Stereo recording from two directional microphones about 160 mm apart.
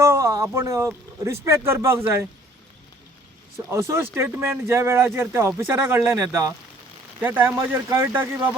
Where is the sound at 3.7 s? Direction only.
15° right (ahead or behind).